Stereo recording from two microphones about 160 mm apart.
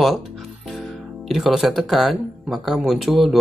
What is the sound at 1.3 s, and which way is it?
Speech, centre (ahead or behind).